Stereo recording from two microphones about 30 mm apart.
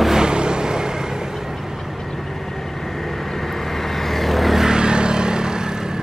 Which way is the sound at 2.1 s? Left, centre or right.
Centre.